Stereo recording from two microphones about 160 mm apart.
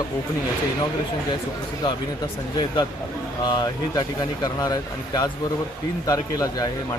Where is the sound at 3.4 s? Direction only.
25° left (ahead or behind).